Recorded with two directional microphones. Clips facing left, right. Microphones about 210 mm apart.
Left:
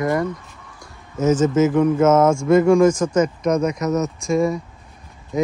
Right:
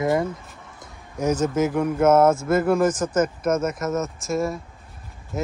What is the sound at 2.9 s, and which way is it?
Speech, 10° left (ahead or behind).